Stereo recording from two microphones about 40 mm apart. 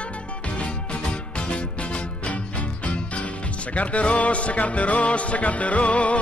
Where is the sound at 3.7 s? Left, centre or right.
Left.